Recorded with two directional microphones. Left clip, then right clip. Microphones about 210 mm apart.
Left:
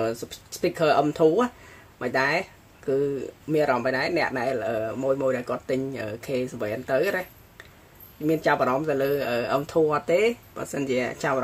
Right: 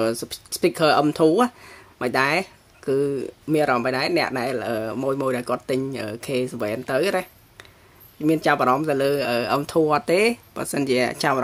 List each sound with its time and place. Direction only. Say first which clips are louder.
0.0 s speech: right 4 dB; 40° right (ahead or behind)